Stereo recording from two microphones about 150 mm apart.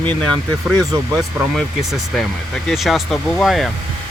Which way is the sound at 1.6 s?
Centre (ahead or behind).